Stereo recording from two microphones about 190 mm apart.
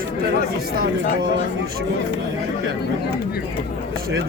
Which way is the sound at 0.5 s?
50° right (ahead or behind).